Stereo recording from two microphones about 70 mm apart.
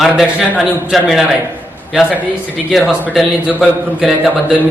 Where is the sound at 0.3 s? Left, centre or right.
Centre.